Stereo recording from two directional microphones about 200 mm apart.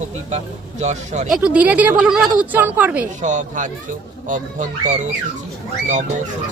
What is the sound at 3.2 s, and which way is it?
Speech, 40° right (ahead or behind).